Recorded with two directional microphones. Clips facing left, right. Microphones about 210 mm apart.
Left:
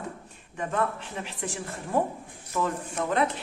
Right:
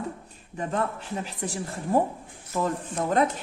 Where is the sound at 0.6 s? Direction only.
35° right (ahead or behind).